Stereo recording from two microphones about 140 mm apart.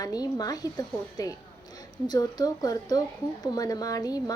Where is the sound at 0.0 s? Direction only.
25° left (ahead or behind).